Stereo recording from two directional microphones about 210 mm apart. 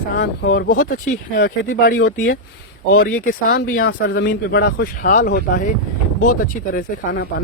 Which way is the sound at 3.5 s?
45° left (ahead or behind).